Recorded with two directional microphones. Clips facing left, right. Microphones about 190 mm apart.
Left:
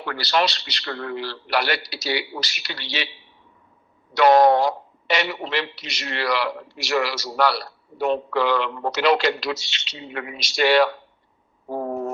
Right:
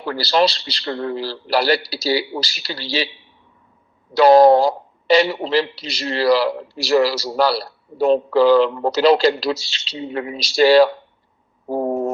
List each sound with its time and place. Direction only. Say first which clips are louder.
0.0 s a man's voice: right 5 dB; 30° right (ahead or behind)
4.1 s a man's voice: right 5 dB; 30° right (ahead or behind)
11.7 s a sound: right 6 dB; 30° right (ahead or behind)